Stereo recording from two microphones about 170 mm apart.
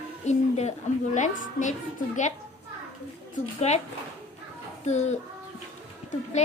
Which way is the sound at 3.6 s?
40° left (ahead or behind).